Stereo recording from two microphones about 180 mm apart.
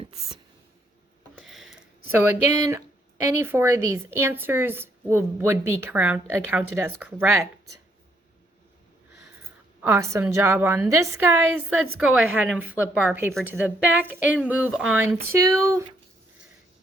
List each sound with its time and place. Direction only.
1.4 s a sound: centre (ahead or behind)
2.5 s a woman's voice: 15° right (ahead or behind)
9.8 s a woman's voice: 15° right (ahead or behind)